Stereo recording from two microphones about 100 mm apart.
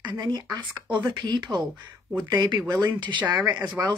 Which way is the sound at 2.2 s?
45° right (ahead or behind).